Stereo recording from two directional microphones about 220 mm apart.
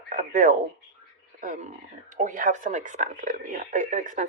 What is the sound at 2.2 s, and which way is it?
A woman's voice, 35° right (ahead or behind).